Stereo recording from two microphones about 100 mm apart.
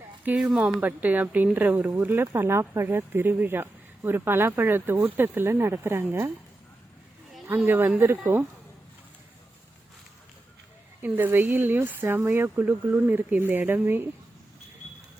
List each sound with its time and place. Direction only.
0.3 s speech: 15° right (ahead or behind)
7.4 s speech: 25° right (ahead or behind)
11.0 s speech: 20° right (ahead or behind)